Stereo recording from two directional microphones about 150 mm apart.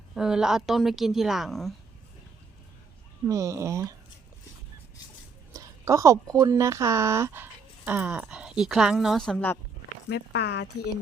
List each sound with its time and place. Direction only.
0.1 s speech: 5° right (ahead or behind)
3.2 s speech: 20° right (ahead or behind)
5.5 s speech: 20° right (ahead or behind); by 9.6 s 10° left (ahead or behind)
10.3 s speech: 90° left